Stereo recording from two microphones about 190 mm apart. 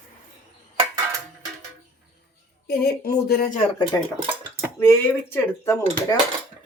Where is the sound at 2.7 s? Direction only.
55° left (ahead or behind).